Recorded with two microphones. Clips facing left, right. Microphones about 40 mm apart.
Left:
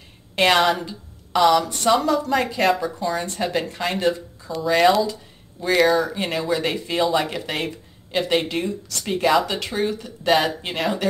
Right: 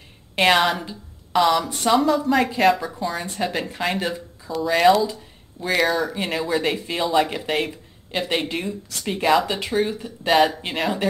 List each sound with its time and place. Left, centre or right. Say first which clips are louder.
0.4 s speech: even; centre